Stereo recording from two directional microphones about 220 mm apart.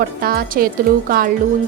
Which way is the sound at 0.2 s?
40° right (ahead or behind).